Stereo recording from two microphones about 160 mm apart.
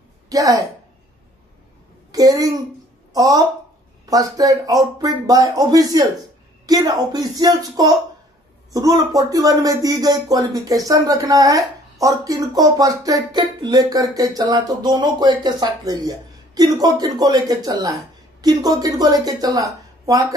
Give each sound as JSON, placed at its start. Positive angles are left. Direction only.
{"t": 0.3, "sound": "speech", "side_deg": -20}
{"t": 2.1, "sound": "a woman's voice", "side_deg": -25}